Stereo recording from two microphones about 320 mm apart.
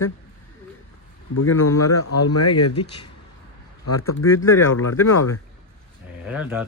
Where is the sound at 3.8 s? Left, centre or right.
Left.